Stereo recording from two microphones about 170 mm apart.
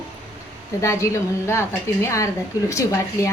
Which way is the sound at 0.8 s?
15° left (ahead or behind).